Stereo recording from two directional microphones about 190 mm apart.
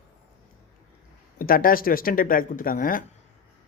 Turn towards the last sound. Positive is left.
turn(degrees=45)  # may be behind; listen again after turning